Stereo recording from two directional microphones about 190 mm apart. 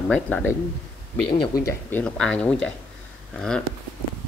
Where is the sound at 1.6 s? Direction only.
10° left (ahead or behind).